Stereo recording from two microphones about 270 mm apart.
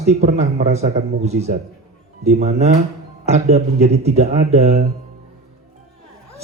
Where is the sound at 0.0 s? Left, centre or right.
Right.